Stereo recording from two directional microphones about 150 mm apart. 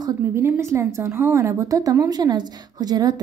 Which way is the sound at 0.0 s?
15° right (ahead or behind).